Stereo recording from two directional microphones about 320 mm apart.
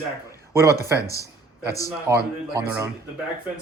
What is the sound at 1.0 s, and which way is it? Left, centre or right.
Speech, centre.